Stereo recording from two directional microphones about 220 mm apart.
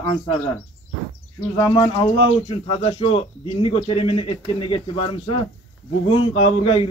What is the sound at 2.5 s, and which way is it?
Speech, 25° left (ahead or behind).